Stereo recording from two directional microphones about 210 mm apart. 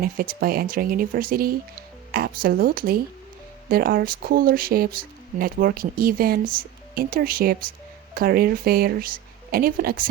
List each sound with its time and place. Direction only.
0.0 s speech: 45° right (ahead or behind)